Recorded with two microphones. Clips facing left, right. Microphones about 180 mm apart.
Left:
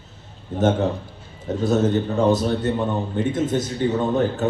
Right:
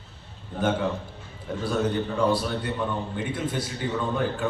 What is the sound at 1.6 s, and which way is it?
A man's voice, 45° left (ahead or behind).